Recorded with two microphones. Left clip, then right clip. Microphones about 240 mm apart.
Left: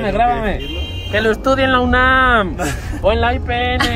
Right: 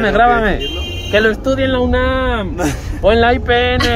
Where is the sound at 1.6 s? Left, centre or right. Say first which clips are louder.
Left 2 dB; centre.